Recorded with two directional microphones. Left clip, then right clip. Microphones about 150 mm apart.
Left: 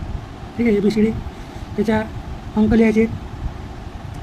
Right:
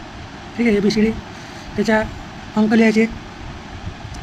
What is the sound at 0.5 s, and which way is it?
Speech, 5° left (ahead or behind).